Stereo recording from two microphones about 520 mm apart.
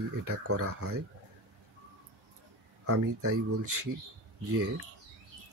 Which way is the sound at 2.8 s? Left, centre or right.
Right.